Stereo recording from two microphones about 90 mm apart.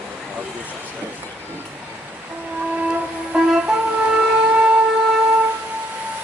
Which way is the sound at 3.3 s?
10° right (ahead or behind).